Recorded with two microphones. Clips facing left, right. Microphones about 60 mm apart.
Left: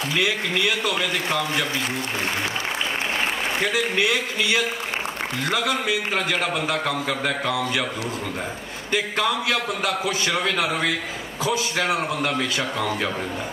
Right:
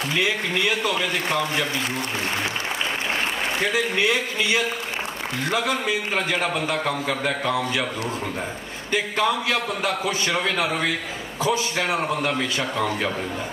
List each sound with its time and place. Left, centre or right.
0.2 s a man's voice: right
3.7 s a man's voice: right
6.1 s a man's voice: centre
8.9 s a man's voice: right
11.4 s a man's voice: right
12.2 s a man's voice: centre